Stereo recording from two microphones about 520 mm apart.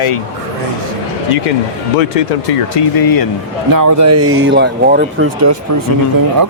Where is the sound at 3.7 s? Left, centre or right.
Right; by 5.2 s centre.